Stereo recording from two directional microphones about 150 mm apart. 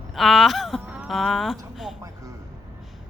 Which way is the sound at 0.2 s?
Centre (ahead or behind).